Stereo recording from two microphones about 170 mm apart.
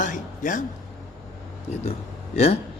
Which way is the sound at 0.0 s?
50° left (ahead or behind).